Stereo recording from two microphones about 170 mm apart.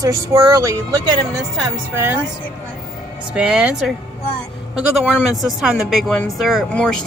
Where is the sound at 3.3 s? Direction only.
5° right (ahead or behind).